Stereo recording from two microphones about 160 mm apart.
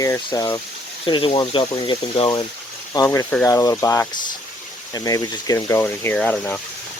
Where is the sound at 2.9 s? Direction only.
20° left (ahead or behind).